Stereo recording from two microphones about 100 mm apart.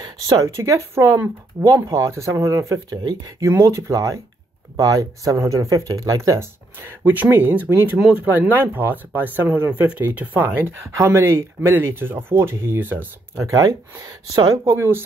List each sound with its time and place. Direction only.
0.0 s a sound: 45° right (ahead or behind)
0.9 s speech: 30° right (ahead or behind)
3.4 s speech: 30° right (ahead or behind)
7.1 s speech: 20° right (ahead or behind)
13.4 s speech: 30° right (ahead or behind)
14.7 s speech: 25° right (ahead or behind)